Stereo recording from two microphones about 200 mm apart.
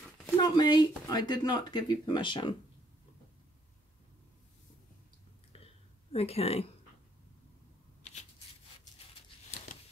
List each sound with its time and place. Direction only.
0.4 s speech: 20° left (ahead or behind)
6.1 s speech: 30° left (ahead or behind)
8.0 s shuffling cards: 35° left (ahead or behind)